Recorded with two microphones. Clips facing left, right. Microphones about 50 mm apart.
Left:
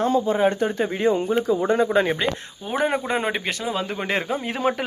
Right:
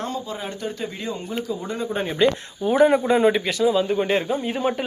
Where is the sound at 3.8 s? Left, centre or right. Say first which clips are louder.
Right 4 dB; left.